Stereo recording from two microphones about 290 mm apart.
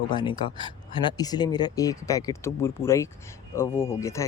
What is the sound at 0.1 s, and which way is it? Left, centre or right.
Speech, centre.